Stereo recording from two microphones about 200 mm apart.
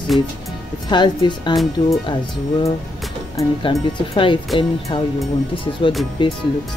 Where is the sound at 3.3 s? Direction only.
25° left (ahead or behind).